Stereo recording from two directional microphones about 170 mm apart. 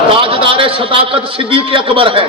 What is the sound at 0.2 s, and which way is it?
A man's voice, 30° right (ahead or behind).